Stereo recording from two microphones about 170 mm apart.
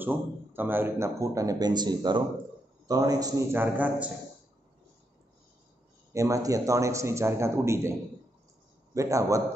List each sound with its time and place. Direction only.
0.0 s a man's voice: 10° right (ahead or behind)
6.1 s a man's voice: 20° right (ahead or behind)
8.9 s a man's voice: 20° right (ahead or behind)